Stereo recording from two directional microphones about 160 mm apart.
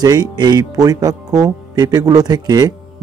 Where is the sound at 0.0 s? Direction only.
25° right (ahead or behind).